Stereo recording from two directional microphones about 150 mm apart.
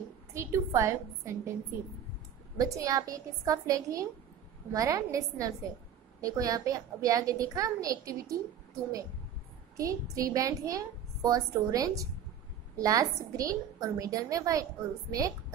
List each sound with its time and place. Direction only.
0.3 s a woman's voice: 20° right (ahead or behind)
9.8 s a woman's voice: 20° right (ahead or behind)